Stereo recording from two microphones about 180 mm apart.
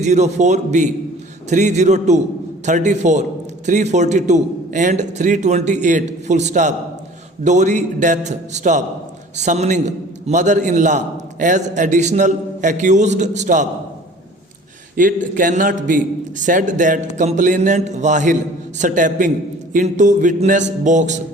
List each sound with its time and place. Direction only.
0.0 s a man's voice: 40° right (ahead or behind)
14.9 s a man's voice: 50° right (ahead or behind)